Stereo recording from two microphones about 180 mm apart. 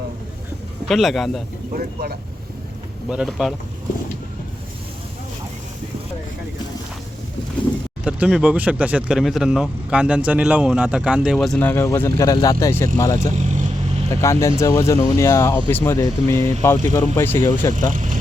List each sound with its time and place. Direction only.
0.9 s speech: centre (ahead or behind)
1.7 s speech: 55° right (ahead or behind)
3.1 s speech: 5° right (ahead or behind)
8.0 s speech: 5° right (ahead or behind); by 17.7 s 15° left (ahead or behind)
17.9 s vehicle: 45° right (ahead or behind)